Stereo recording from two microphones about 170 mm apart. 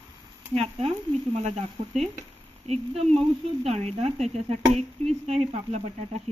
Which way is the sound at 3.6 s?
40° right (ahead or behind).